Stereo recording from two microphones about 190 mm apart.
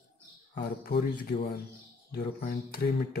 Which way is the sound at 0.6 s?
55° left (ahead or behind).